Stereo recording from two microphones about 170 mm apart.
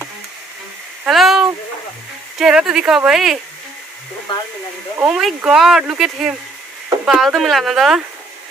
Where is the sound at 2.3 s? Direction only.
Centre (ahead or behind).